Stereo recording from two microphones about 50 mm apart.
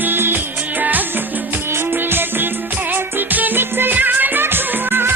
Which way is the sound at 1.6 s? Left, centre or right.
Right.